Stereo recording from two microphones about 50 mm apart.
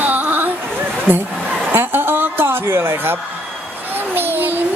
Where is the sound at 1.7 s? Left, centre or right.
Right.